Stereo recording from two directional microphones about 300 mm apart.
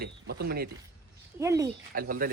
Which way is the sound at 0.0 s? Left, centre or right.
Right.